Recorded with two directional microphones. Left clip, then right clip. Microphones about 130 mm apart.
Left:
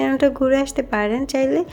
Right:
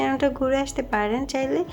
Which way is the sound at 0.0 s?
25° left (ahead or behind).